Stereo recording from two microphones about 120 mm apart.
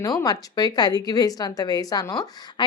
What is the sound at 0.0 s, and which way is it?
Speech, 30° left (ahead or behind).